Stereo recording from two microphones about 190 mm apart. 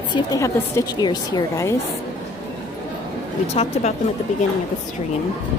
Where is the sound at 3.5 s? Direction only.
35° left (ahead or behind).